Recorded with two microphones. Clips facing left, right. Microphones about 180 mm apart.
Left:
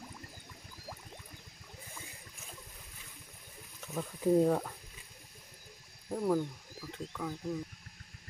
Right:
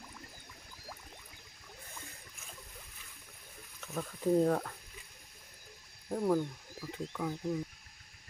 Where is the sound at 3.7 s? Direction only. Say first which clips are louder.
Left 1 dB; 5° left (ahead or behind).